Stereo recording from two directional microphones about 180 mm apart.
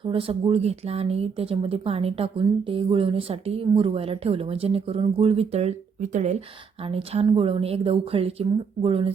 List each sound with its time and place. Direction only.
0.0 s speech: 30° right (ahead or behind)